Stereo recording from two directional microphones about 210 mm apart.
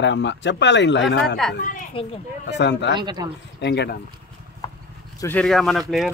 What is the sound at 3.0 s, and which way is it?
Speech, 20° right (ahead or behind).